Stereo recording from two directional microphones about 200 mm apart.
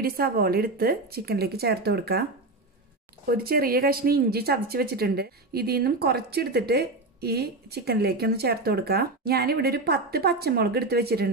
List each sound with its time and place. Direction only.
0.0 s speech: 50° right (ahead or behind)
3.3 s speech: 50° right (ahead or behind)